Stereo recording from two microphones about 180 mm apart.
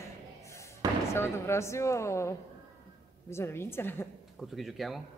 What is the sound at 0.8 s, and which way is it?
Basketball bounce, 20° right (ahead or behind).